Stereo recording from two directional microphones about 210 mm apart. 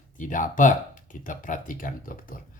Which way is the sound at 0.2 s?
40° left (ahead or behind).